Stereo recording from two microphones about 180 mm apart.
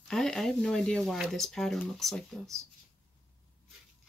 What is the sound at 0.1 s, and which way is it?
Speech, centre (ahead or behind).